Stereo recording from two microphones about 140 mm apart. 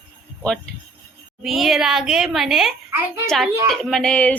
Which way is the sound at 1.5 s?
Centre (ahead or behind).